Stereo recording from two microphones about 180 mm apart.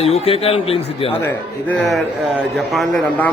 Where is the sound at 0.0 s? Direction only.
35° left (ahead or behind).